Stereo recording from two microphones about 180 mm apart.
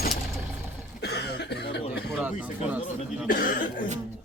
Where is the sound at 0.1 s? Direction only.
Centre (ahead or behind).